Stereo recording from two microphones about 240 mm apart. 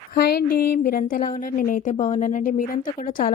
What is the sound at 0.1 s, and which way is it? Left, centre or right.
A woman's voice, left.